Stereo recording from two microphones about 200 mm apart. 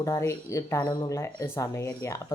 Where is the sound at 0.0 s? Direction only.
15° left (ahead or behind).